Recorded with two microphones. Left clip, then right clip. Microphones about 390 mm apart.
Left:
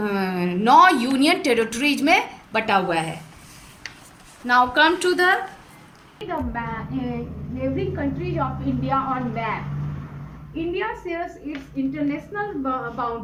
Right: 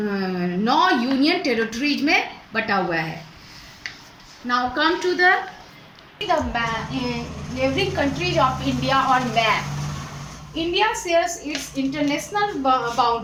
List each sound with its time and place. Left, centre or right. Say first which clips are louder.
0.1 s a sound: left 1 dB; left
4.4 s a woman's voice: left 4 dB; left
6.2 s a woman's voice: right 6 dB; right